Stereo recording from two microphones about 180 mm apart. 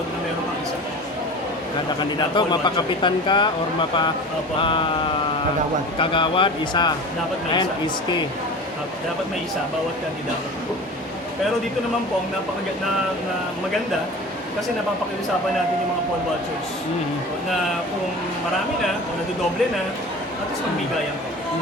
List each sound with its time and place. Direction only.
2.3 s speech: 25° left (ahead or behind)
6.0 s speech: 30° left (ahead or behind)